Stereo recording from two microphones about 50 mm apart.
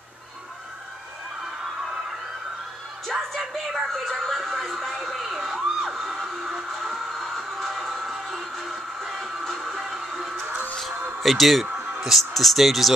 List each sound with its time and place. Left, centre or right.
3.1 s music: centre
3.9 s emergency vehicle: centre
9.0 s music: centre
11.1 s speech: centre
11.7 s a sound: centre
12.0 s speech: centre